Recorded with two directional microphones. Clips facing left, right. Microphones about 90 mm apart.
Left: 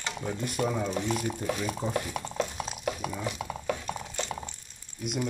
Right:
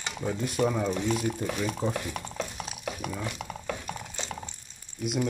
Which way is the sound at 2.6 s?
25° left (ahead or behind).